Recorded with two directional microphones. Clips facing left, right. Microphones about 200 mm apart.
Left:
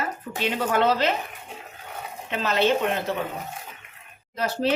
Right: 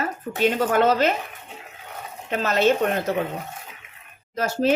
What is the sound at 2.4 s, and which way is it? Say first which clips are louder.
Speech: right 3 dB; 45° right (ahead or behind).